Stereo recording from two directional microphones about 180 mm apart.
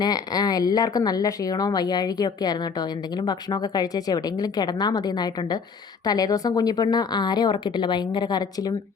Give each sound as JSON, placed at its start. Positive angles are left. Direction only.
{"t": 0.0, "sound": "speech", "side_deg": 20}